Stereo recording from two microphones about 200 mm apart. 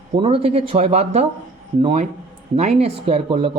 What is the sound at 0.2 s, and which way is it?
Speech, 30° right (ahead or behind).